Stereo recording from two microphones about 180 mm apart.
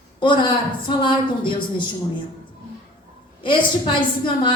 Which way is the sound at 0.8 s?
25° left (ahead or behind).